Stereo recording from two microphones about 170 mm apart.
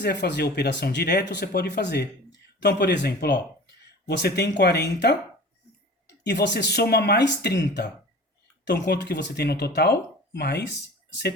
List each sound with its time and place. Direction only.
0.0 s speech: 85° left
6.2 s speech: 80° left
8.6 s speech: 75° left (ahead or behind)